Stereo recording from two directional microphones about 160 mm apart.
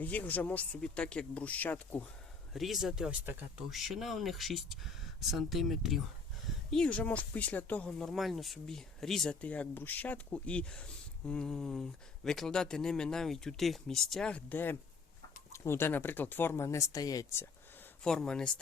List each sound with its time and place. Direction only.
0.0 s speech: 10° left (ahead or behind)
2.5 s speech: centre (ahead or behind); by 17.5 s 20° left (ahead or behind)
18.0 s speech: 5° left (ahead or behind)